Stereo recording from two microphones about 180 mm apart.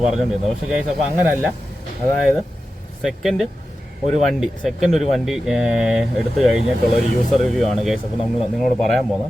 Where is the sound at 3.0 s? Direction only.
Centre (ahead or behind).